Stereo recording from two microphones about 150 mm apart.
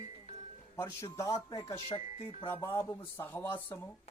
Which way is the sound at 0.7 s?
20° left (ahead or behind).